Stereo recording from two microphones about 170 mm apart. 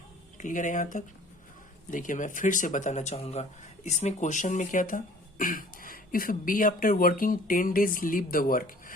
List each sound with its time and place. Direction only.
0.3 s speech: 50° left (ahead or behind)